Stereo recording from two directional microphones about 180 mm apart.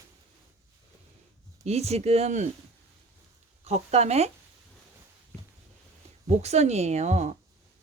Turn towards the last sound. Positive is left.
turn(degrees=-40)  # may be behind; listen again after turning